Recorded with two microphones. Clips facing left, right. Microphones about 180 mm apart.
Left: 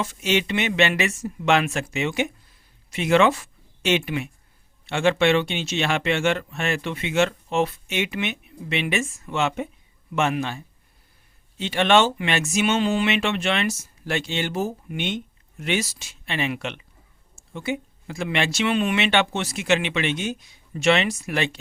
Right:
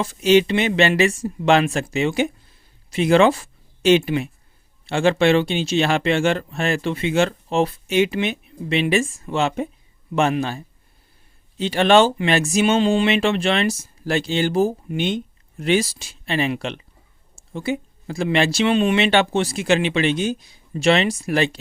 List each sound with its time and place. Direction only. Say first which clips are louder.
0.0 s speech: right 8 dB; 35° right (ahead or behind)